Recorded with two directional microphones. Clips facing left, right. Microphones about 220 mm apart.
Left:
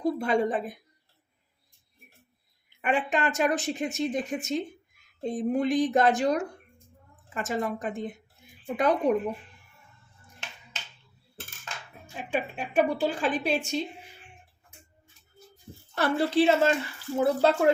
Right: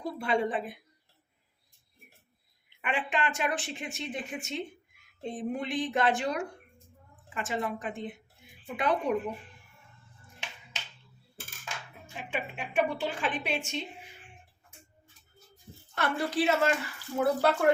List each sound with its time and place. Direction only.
0.2 s speech: 40° left (ahead or behind)
2.8 s speech: 40° left (ahead or behind)
12.1 s speech: 40° left (ahead or behind)
16.0 s speech: 30° left (ahead or behind)